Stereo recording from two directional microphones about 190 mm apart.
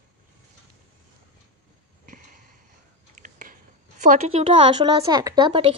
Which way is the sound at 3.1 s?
45° right (ahead or behind).